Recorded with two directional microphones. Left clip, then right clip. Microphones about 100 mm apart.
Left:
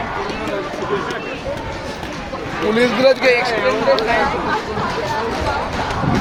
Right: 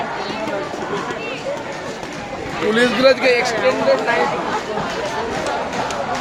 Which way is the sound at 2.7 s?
25° right (ahead or behind).